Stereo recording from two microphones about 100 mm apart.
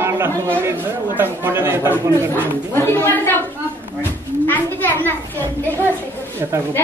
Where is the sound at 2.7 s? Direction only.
25° left (ahead or behind).